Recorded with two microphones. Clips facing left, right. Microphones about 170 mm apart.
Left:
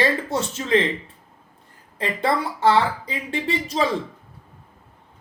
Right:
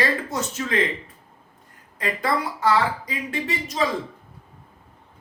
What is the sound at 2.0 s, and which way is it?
Speech, 30° left (ahead or behind).